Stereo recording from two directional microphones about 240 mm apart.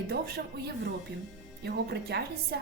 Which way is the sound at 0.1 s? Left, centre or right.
Right.